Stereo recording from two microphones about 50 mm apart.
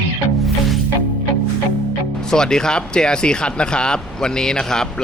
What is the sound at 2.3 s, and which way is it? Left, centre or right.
Speech, centre.